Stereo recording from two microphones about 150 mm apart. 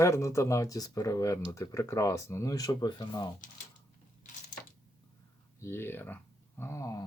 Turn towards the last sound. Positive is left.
turn(degrees=20)  # may be behind; listen again after turning